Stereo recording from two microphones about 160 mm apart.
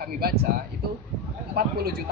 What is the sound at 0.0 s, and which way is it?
Speech, 75° right (ahead or behind).